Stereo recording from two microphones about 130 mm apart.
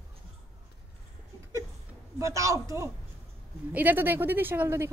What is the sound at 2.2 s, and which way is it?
Speech, 25° right (ahead or behind).